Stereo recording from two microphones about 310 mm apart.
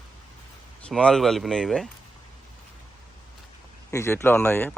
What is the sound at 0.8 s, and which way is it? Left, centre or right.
Speech, centre.